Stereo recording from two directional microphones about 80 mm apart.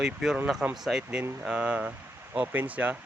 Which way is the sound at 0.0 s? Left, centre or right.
Centre.